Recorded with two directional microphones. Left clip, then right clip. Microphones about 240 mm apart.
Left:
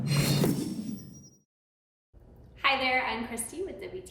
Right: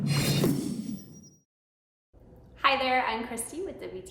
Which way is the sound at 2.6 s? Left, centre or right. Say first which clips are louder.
Right 2 dB; centre.